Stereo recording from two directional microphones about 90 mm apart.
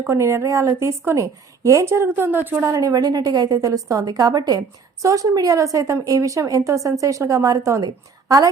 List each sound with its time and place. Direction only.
0.1 s a woman's voice: 30° right (ahead or behind)
2.7 s a woman's voice: 45° right (ahead or behind)